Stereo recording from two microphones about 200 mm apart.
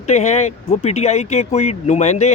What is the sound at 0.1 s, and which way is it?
Speech, 35° left (ahead or behind).